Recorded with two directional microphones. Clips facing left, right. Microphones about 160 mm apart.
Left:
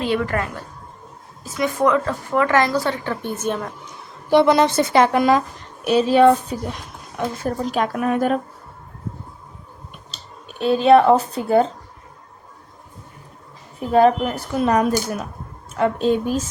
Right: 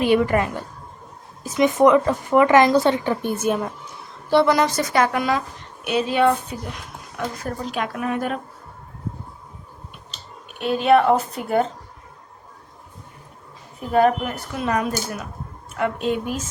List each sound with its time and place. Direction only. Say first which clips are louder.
0.0 s speech: right 4 dB; 15° right (ahead or behind)
4.3 s speech: left 3 dB; 20° left (ahead or behind); by 6.6 s 35° left (ahead or behind)
7.2 s speech: left 3 dB; 25° left (ahead or behind)
7.6 s speech: left 5 dB; 40° left (ahead or behind)
10.1 s speech: left 1 dB; 30° left (ahead or behind)
13.9 s speech: left 3 dB; 30° left (ahead or behind)